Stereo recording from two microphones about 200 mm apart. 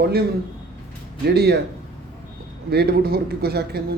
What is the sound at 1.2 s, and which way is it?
Speech, 55° right (ahead or behind).